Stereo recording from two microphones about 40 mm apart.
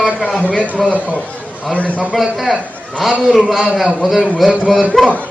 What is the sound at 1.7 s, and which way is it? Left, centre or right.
Speech, left.